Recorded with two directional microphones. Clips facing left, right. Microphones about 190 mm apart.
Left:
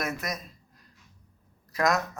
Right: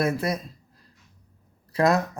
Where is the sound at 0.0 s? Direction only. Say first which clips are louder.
Right 8 dB; 30° right (ahead or behind).